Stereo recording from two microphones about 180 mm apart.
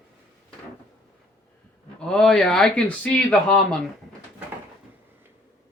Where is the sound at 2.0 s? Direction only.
5° left (ahead or behind).